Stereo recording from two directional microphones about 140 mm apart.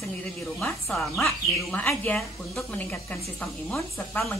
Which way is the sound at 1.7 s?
10° left (ahead or behind).